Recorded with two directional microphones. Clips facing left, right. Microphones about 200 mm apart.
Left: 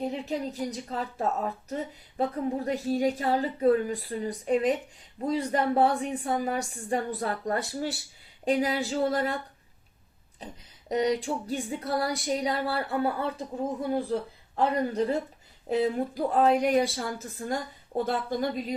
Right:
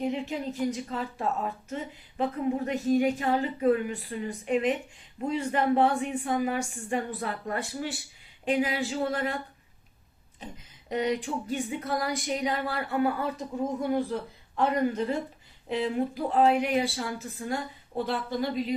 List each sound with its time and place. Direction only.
0.0 s speech: 35° left (ahead or behind)
10.4 s speech: 35° left (ahead or behind)